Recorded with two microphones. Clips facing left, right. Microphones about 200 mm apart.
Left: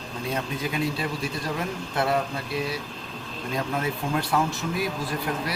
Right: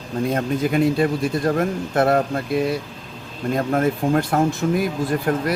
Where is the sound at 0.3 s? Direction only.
50° right (ahead or behind).